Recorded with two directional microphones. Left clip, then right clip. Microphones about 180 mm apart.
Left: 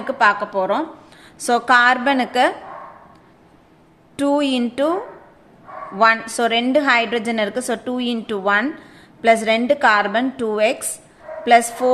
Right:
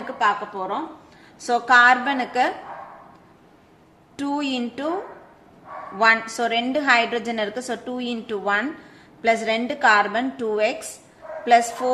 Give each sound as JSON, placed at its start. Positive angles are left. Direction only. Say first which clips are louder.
{"t": 0.2, "sound": "a woman's voice", "louder": "left 5 dB", "side_deg": 45}
{"t": 1.4, "sound": "a woman's voice", "louder": "left 1 dB", "side_deg": 30}
{"t": 4.2, "sound": "a woman's voice", "louder": "left 7 dB", "side_deg": 25}